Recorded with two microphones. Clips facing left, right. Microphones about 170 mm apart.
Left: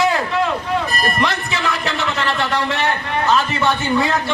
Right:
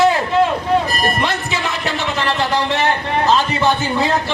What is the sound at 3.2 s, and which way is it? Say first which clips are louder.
Speech: right 1 dB; 25° right (ahead or behind).